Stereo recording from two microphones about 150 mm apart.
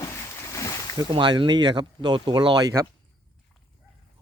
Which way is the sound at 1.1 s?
30° right (ahead or behind).